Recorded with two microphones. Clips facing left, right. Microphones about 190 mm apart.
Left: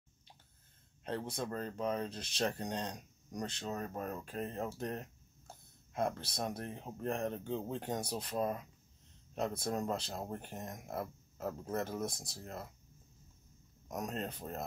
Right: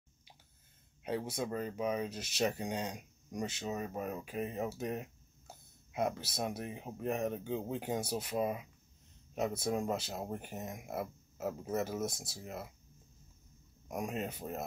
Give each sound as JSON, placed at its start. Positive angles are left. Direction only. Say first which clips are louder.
{"t": 1.0, "sound": "speech", "louder": "right 2 dB", "side_deg": -5}
{"t": 13.8, "sound": "speech", "louder": "right 2 dB", "side_deg": -10}